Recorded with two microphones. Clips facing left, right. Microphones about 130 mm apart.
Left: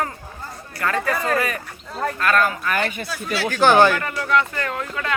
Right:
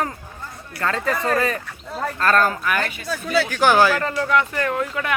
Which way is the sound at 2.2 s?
35° right (ahead or behind).